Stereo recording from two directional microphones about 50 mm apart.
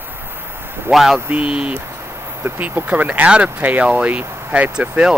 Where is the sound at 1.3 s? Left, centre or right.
Right.